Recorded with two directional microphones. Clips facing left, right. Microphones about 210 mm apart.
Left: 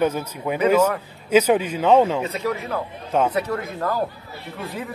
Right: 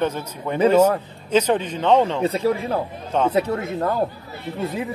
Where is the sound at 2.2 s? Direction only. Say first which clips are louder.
Right 5 dB; 30° right (ahead or behind).